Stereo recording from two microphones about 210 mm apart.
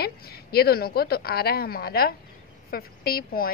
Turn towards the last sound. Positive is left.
turn(degrees=45)  # may be behind; listen again after turning